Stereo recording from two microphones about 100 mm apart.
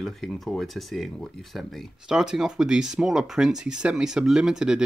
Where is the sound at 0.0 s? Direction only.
5° left (ahead or behind).